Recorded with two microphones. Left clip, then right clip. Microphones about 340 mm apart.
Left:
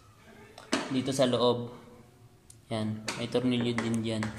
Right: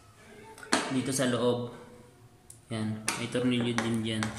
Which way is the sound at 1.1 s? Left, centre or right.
Centre.